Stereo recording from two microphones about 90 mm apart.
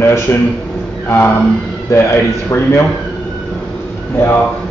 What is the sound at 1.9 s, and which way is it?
Speech, 35° left (ahead or behind).